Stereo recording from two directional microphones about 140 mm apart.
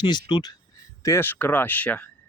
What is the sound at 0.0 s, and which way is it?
Speech, 30° left (ahead or behind).